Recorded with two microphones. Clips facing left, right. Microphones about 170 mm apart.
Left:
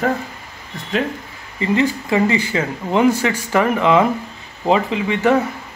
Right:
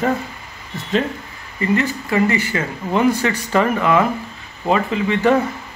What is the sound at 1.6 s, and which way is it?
Speech, 15° left (ahead or behind).